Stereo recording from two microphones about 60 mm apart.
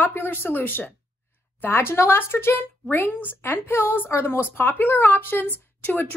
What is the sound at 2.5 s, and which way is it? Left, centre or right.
A woman's voice, left.